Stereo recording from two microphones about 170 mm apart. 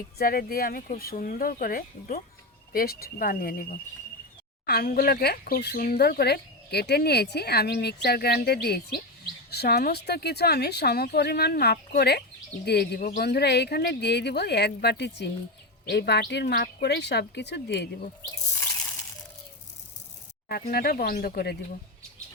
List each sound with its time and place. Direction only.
0.2 s speech: 60° left (ahead or behind); by 18.1 s 80° left
20.5 s speech: 65° left (ahead or behind)